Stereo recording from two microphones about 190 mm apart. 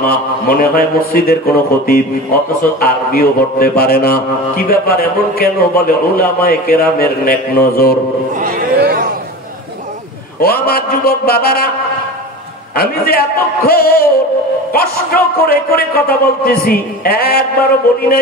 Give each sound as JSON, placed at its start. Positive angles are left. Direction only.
{"t": 0.0, "sound": "a man's voice", "side_deg": 50}
{"t": 8.4, "sound": "a sound", "side_deg": -50}
{"t": 10.4, "sound": "a man's voice", "side_deg": 55}
{"t": 12.7, "sound": "a man's voice", "side_deg": 55}